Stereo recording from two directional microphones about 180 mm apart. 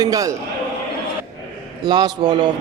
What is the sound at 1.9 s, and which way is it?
Speech, 25° right (ahead or behind).